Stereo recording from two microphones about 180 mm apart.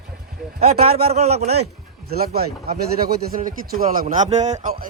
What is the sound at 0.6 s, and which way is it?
A man's voice, 35° right (ahead or behind).